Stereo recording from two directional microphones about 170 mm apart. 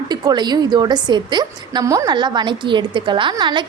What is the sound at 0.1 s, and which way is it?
A woman's voice, 25° right (ahead or behind).